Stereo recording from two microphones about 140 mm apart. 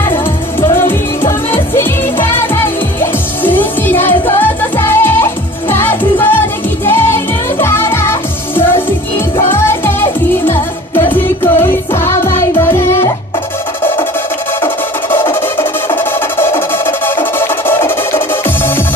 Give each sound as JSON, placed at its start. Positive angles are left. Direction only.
{"t": 0.1, "sound": "music", "side_deg": 15}
{"t": 14.6, "sound": "music", "side_deg": 15}